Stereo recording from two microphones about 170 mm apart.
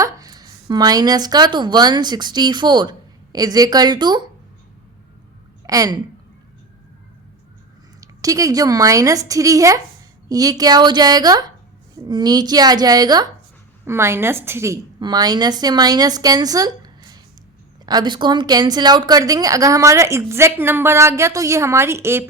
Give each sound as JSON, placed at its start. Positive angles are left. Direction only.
{"t": 0.0, "sound": "a woman's voice", "side_deg": -20}
{"t": 5.6, "sound": "a woman's voice", "side_deg": -20}
{"t": 8.0, "sound": "a woman's voice", "side_deg": -20}